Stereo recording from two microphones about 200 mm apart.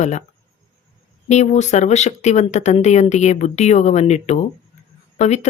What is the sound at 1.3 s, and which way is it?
Speech, 35° left (ahead or behind).